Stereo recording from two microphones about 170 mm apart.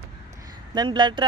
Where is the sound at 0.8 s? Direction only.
25° right (ahead or behind).